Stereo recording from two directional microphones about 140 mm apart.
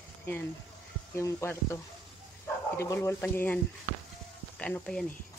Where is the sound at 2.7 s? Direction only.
20° left (ahead or behind).